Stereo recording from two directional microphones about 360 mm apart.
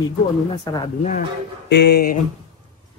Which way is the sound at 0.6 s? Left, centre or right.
Centre.